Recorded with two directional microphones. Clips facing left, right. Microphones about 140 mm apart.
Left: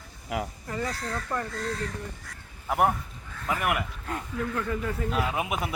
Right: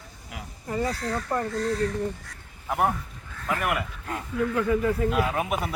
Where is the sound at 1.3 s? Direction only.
35° right (ahead or behind).